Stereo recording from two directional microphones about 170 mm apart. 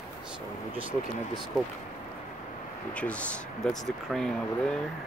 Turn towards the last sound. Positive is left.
turn(degrees=5)  # may be behind; listen again after turning